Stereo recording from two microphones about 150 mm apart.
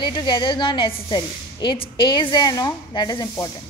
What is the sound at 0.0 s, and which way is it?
A woman's voice, 30° left (ahead or behind).